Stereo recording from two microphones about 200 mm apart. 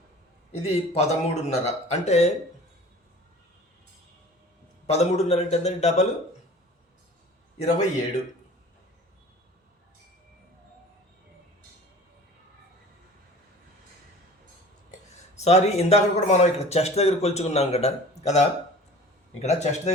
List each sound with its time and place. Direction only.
0.9 s speech: 30° left (ahead or behind)
4.9 s speech: 30° left (ahead or behind)
7.6 s speech: 35° left (ahead or behind)
15.4 s speech: 35° left (ahead or behind)